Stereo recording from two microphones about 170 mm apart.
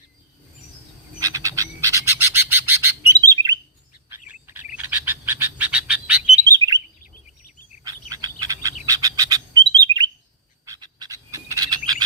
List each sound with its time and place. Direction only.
1.2 s bird: 20° right (ahead or behind)
4.1 s frog: 10° right (ahead or behind)
6.5 s chirp: 20° right (ahead or behind)
7.9 s bird: 20° right (ahead or behind)
10.7 s frog: 20° right (ahead or behind)